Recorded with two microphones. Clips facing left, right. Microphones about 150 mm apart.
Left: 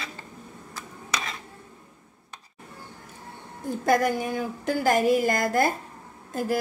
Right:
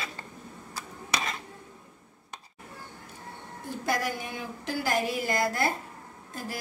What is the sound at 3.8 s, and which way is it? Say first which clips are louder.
A woman's voice: left 8 dB; 50° left (ahead or behind).